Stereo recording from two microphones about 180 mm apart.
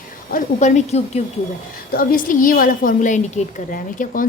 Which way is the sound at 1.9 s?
50° left (ahead or behind).